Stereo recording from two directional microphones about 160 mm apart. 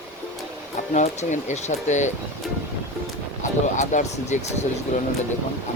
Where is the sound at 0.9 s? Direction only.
50° left (ahead or behind).